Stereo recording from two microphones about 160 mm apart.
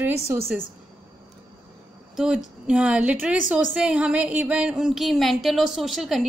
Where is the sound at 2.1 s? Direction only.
5° right (ahead or behind).